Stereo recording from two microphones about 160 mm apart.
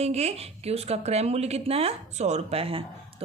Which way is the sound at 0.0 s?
40° right (ahead or behind).